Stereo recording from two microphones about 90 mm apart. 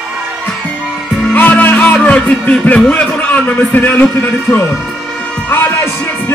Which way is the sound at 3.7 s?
25° left (ahead or behind).